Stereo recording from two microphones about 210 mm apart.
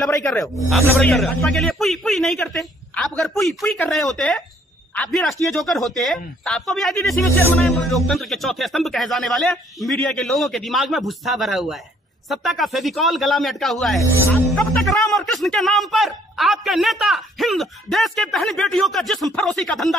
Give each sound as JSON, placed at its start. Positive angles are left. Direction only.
{"t": 0.1, "sound": "a man's voice", "side_deg": 5}